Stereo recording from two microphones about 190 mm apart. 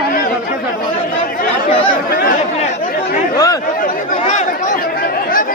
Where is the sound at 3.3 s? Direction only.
20° left (ahead or behind).